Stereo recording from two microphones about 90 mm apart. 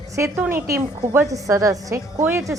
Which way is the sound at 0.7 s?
35° right (ahead or behind).